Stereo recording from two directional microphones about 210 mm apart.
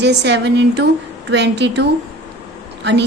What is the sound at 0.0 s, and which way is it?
A woman's voice, 55° right (ahead or behind).